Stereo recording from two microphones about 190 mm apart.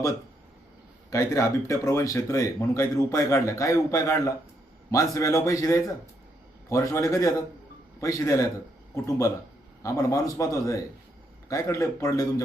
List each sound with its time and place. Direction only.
1.1 s speech: 15° left (ahead or behind)
9.8 s speech: 15° left (ahead or behind)